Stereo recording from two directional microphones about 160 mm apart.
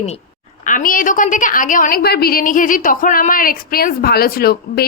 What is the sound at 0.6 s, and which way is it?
A woman's voice, 55° left (ahead or behind).